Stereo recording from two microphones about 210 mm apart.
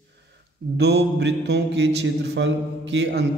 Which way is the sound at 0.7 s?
50° right (ahead or behind).